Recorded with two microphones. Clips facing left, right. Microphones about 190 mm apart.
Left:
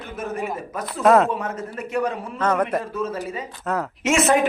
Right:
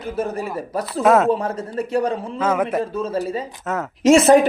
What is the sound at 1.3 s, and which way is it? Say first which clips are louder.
Speech: right 6 dB; 30° right (ahead or behind).